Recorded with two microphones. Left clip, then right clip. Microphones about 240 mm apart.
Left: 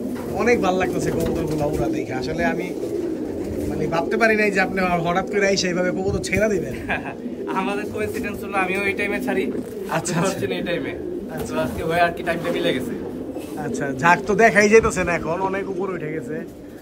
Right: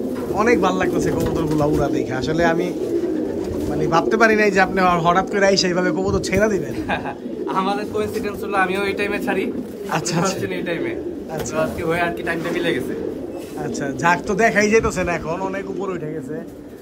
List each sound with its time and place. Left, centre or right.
0.4 s speech: centre
1.8 s speech: centre
3.8 s speech: centre
7.5 s speech: right
9.9 s speech: centre
14.0 s speech: centre